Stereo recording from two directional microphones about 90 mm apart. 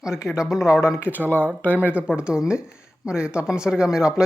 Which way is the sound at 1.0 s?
20° right (ahead or behind).